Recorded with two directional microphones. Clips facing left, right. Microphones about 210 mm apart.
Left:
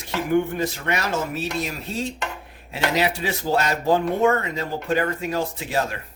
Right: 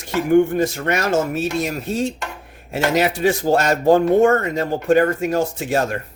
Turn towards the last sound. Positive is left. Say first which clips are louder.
# right 5 dB
turn(degrees=-50)  # may be behind; listen again after turning